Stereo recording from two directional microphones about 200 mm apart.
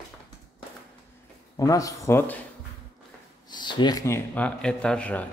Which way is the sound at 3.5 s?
20° left (ahead or behind).